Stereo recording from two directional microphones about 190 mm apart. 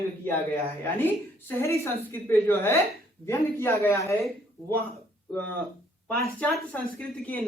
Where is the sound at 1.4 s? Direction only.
15° left (ahead or behind).